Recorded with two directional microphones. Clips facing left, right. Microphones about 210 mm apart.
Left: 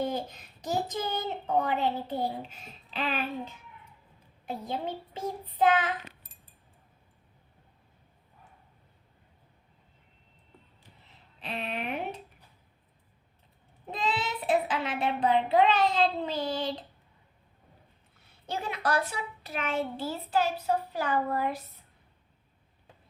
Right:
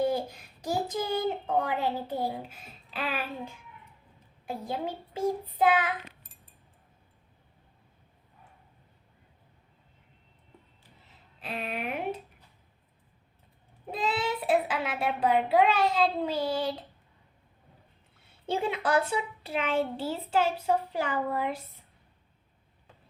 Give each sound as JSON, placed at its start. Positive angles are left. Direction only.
{"t": 0.0, "sound": "a child's voice", "side_deg": -10}
{"t": 11.3, "sound": "speech", "side_deg": -5}
{"t": 13.9, "sound": "a child's voice", "side_deg": -5}
{"t": 18.5, "sound": "a child's voice", "side_deg": -25}